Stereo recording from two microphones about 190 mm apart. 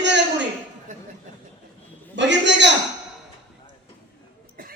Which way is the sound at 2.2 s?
65° right (ahead or behind).